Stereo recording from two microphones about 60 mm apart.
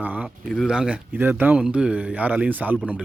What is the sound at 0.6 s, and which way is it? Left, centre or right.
Speech, centre.